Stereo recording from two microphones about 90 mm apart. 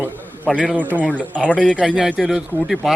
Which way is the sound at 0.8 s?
20° right (ahead or behind).